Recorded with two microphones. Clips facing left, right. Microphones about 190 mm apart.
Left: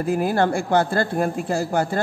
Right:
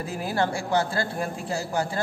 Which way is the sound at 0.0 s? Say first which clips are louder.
Left 7 dB; 55° left (ahead or behind).